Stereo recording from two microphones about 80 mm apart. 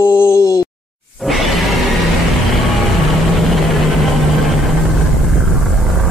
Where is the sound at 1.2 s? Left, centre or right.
Centre.